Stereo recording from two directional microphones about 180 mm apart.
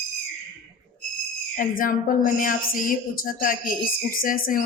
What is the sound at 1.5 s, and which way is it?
A woman's voice, 50° left (ahead or behind).